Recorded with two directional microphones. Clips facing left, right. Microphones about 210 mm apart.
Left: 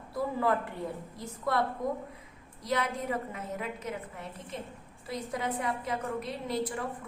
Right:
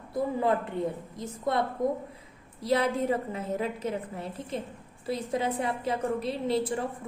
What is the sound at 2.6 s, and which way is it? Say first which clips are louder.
A woman's voice: right 6 dB; 30° right (ahead or behind).